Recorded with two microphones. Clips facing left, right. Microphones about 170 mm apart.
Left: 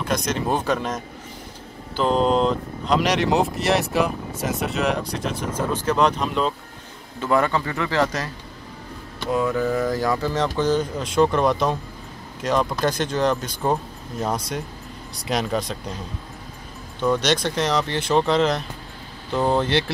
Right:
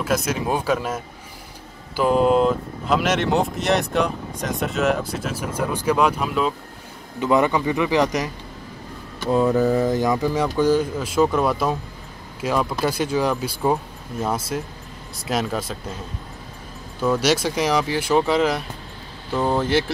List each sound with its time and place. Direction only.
0.0 s speech: 5° right (ahead or behind)
7.2 s speech: 15° right (ahead or behind)
9.3 s speech: 30° right (ahead or behind); by 15.8 s 5° right (ahead or behind)
17.0 s speech: 5° right (ahead or behind)